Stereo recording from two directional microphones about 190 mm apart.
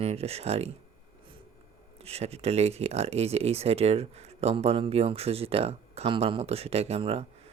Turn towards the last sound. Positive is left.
turn(degrees=-30)  # may be behind; listen again after turning